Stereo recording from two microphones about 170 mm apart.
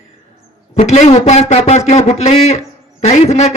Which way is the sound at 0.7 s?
40° left (ahead or behind).